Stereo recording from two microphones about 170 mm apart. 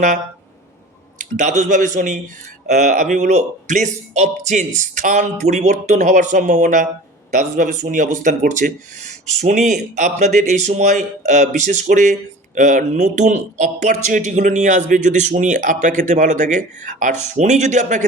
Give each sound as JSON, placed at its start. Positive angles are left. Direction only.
{"t": 1.2, "sound": "speech", "side_deg": -45}